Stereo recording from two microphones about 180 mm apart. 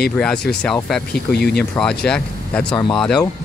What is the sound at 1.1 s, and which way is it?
Speech, 65° left (ahead or behind).